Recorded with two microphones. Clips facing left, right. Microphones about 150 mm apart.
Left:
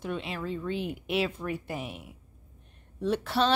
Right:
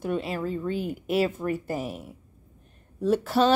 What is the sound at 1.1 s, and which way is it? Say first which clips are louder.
Speech: right 5 dB; centre (ahead or behind).